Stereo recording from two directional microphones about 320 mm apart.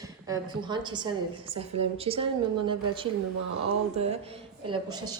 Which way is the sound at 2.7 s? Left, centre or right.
Centre.